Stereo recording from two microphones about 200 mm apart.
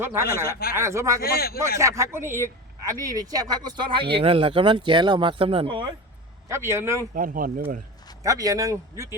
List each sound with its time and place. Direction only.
0.0 s speech: 10° right (ahead or behind)
1.2 s speech: 50° left (ahead or behind)
1.8 s speech: 15° right (ahead or behind)
6.5 s speech: 15° right (ahead or behind)
7.1 s speech: 45° right (ahead or behind)
8.2 s speech: 15° right (ahead or behind)